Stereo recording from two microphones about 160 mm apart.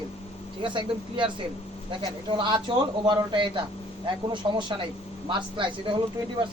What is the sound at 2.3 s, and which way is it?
Speech, 30° right (ahead or behind).